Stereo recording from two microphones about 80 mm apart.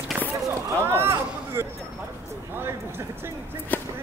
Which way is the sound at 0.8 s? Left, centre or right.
Right.